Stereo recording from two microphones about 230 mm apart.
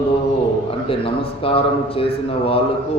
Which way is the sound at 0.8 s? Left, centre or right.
Left.